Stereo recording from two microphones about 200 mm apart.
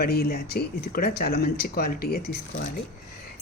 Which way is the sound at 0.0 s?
50° left (ahead or behind).